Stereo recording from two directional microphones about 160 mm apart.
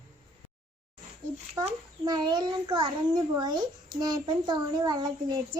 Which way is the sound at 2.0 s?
25° right (ahead or behind).